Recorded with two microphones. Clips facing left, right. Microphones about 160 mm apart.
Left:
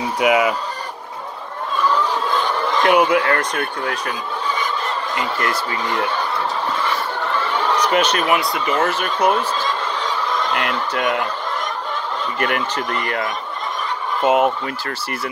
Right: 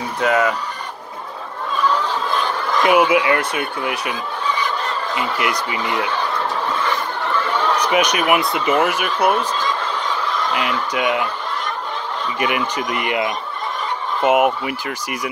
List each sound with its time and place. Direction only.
0.2 s speech: 10° left (ahead or behind)
2.8 s speech: 5° right (ahead or behind)
5.1 s speech: 5° right (ahead or behind)
5.5 s speech: 15° right (ahead or behind)
7.8 s speech: 10° right (ahead or behind)
10.5 s speech: 5° right (ahead or behind)
12.4 s speech: 10° right (ahead or behind)